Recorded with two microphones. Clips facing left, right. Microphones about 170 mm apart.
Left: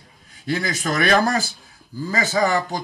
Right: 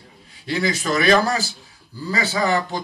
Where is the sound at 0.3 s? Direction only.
45° left (ahead or behind).